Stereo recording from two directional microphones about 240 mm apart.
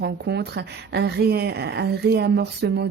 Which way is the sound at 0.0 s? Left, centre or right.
Right.